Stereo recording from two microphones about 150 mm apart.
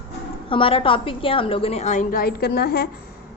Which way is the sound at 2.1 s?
90° left.